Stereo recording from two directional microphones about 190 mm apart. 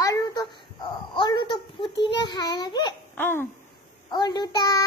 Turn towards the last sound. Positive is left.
turn(degrees=20)  # may be behind; listen again after turning